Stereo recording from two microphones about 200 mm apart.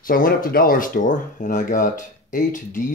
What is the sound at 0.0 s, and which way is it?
Speech, 45° left (ahead or behind).